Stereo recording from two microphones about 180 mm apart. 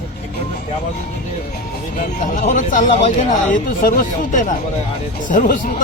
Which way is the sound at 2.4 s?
45° left (ahead or behind).